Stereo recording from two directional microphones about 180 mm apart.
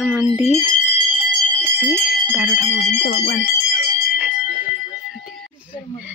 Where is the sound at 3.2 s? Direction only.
60° left (ahead or behind).